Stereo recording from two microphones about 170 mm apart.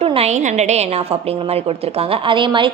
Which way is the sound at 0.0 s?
35° right (ahead or behind).